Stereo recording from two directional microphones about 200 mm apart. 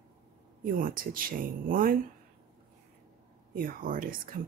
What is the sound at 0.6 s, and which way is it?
Speech, 45° right (ahead or behind).